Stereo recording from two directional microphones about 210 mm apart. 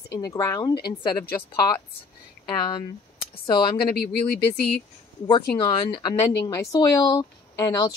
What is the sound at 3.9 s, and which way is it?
Speech, 50° left (ahead or behind).